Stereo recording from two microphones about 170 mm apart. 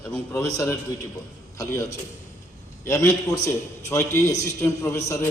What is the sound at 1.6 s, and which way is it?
A man's voice, 20° left (ahead or behind).